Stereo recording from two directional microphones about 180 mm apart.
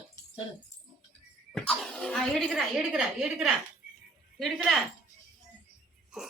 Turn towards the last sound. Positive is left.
turn(degrees=-5)  # may be behind; listen again after turning